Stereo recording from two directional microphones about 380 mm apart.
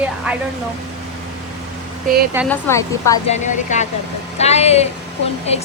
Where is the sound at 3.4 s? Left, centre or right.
Centre.